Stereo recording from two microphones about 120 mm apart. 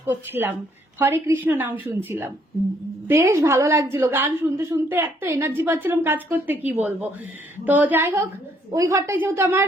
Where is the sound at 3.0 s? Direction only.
20° right (ahead or behind).